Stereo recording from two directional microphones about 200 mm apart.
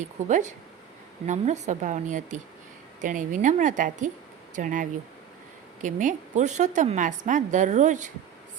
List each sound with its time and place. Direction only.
0.3 s a woman's voice: 40° right (ahead or behind)